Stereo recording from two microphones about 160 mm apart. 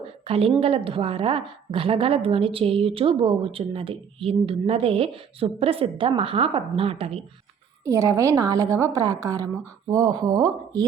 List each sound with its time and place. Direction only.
0.3 s a woman's voice: 35° right (ahead or behind)
7.9 s a woman's voice: 20° right (ahead or behind)